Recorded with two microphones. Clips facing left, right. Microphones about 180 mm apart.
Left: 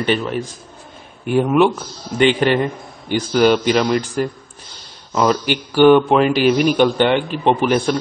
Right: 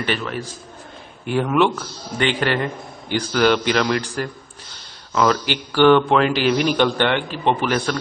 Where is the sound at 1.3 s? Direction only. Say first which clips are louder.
Left 4 dB; 15° left (ahead or behind).